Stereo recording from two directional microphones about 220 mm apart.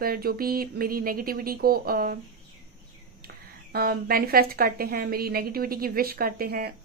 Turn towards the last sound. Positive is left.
turn(degrees=-45)  # may be behind; listen again after turning